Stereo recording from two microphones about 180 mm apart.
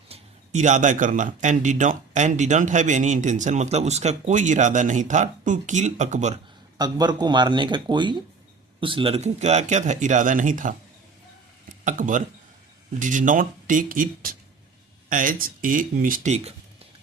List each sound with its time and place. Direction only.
0.1 s speech: 40° right (ahead or behind)
6.7 s speech: 25° right (ahead or behind); by 10.8 s 45° right (ahead or behind)
11.9 s speech: 45° right (ahead or behind)